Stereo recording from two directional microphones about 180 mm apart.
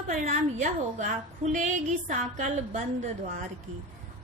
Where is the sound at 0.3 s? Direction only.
40° right (ahead or behind).